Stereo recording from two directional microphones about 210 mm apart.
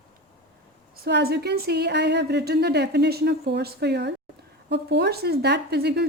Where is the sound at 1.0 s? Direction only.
50° right (ahead or behind).